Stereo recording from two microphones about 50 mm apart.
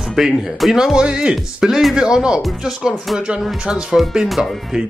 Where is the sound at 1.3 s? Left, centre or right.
Centre.